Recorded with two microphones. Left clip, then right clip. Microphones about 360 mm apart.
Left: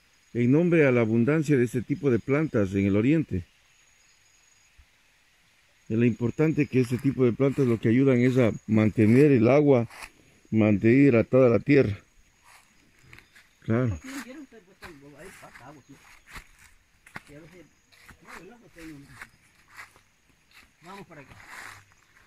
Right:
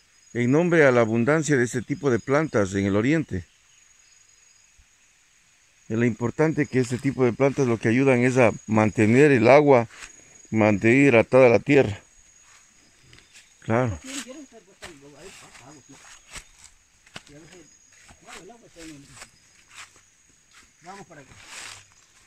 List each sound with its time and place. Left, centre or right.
0.3 s speech: centre
5.9 s speech: centre
8.9 s speech: right
10.8 s speech: centre
11.6 s speech: right
13.1 s a sound: centre
14.8 s snake: centre
18.0 s dog: centre
20.8 s a sound: centre